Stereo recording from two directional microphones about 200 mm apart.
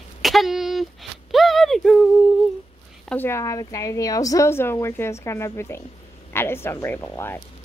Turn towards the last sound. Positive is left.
turn(degrees=10)  # may be behind; listen again after turning